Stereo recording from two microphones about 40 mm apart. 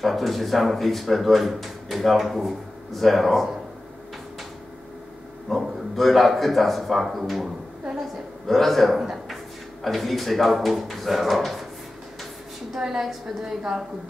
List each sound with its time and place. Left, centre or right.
0.0 s speech: centre
5.5 s speech: centre
8.9 s a sound: centre
9.8 s speech: centre
12.7 s a woman's voice: centre